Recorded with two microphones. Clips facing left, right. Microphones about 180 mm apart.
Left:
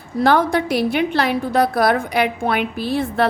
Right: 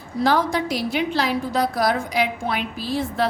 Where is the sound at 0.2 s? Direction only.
60° left (ahead or behind).